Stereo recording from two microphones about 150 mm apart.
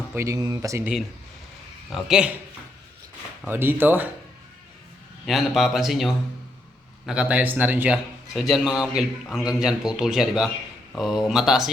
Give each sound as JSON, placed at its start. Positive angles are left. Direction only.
{"t": 0.1, "sound": "speech", "side_deg": -20}
{"t": 1.9, "sound": "a man's voice", "side_deg": 0}
{"t": 3.4, "sound": "speech", "side_deg": -15}
{"t": 5.2, "sound": "a man's voice", "side_deg": 0}